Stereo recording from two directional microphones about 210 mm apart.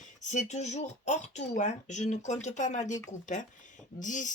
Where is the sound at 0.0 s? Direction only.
35° left (ahead or behind).